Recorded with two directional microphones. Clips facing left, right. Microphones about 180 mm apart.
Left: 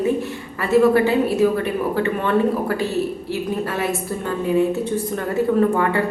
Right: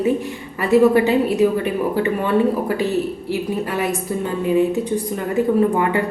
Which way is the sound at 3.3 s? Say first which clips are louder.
Right 4 dB; 15° right (ahead or behind).